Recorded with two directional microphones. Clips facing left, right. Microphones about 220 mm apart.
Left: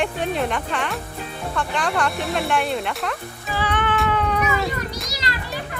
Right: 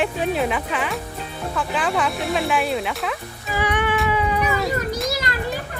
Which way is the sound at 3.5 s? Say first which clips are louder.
Right 2 dB; 15° right (ahead or behind).